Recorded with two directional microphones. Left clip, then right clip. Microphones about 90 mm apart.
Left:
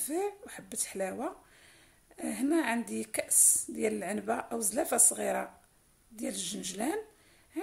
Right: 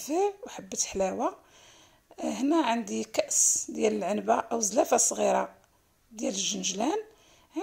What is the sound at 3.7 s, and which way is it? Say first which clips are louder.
A woman's voice: right 6 dB; 25° right (ahead or behind).